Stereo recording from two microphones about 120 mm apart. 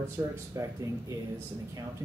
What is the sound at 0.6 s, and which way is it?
Speech, 30° right (ahead or behind).